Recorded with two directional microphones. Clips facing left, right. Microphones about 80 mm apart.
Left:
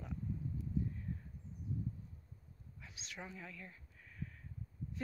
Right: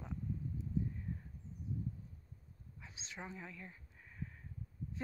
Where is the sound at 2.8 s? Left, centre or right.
Right.